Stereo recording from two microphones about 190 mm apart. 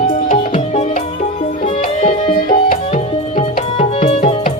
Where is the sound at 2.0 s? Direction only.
35° left (ahead or behind).